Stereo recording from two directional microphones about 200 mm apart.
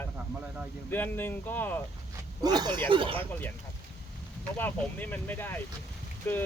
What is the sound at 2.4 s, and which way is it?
Speech, 20° right (ahead or behind).